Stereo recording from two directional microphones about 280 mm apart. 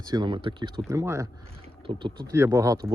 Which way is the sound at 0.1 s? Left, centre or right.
Centre.